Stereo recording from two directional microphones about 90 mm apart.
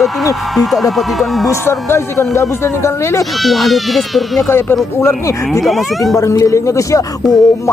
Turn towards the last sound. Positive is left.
turn(degrees=40)  # may be behind; listen again after turning